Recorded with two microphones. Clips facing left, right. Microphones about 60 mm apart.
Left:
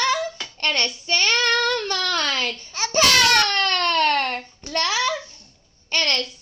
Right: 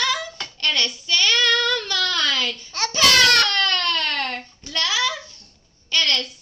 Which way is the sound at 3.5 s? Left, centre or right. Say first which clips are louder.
Left 1 dB; left.